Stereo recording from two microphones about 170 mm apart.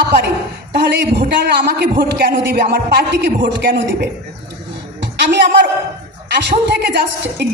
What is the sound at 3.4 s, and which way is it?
Speech, 90° right.